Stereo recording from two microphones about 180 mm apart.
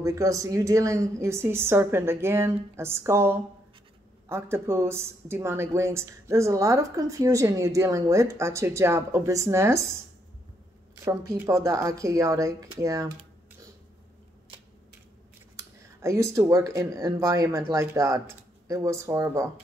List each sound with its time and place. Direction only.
0.0 s speech: 20° right (ahead or behind)
11.1 s speech: 15° right (ahead or behind)
15.5 s speech: 15° right (ahead or behind)